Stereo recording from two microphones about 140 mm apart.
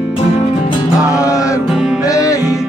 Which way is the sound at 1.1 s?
25° left (ahead or behind).